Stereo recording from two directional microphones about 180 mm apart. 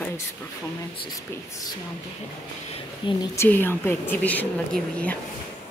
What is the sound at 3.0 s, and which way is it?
A woman's voice, 20° left (ahead or behind).